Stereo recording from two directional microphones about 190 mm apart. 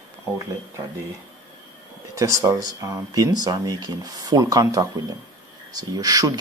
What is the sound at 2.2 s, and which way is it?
Speech, 15° right (ahead or behind).